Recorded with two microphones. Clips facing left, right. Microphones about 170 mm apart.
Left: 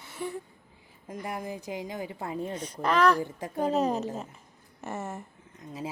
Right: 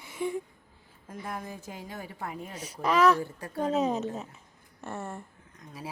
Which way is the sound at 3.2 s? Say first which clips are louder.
Left 2 dB; 15° left (ahead or behind).